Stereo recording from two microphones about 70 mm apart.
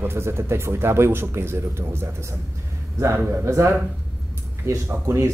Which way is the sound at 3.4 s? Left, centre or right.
Right.